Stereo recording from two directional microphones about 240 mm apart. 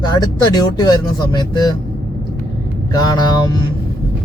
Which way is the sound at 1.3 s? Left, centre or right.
Centre.